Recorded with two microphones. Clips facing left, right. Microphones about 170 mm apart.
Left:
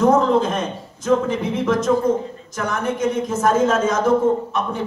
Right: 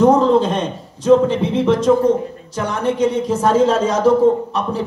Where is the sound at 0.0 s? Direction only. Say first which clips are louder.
Right 3 dB; 30° right (ahead or behind).